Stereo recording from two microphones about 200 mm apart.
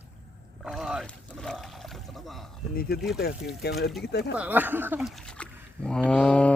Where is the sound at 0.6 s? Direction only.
Centre (ahead or behind).